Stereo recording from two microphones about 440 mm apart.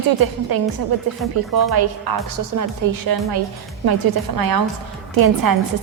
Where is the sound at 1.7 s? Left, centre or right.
Right.